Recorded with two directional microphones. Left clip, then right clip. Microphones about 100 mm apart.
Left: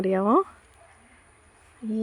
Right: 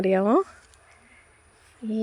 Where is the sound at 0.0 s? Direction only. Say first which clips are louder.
Right 1 dB; 15° right (ahead or behind).